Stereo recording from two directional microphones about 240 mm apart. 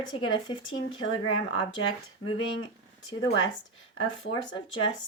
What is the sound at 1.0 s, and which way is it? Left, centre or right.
Speech, left.